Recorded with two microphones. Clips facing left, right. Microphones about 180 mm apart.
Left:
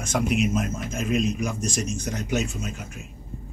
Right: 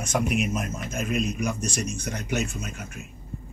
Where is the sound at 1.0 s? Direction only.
60° right (ahead or behind).